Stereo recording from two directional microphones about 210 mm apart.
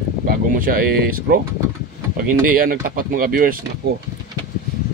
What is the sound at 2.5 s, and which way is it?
Speech, 40° right (ahead or behind).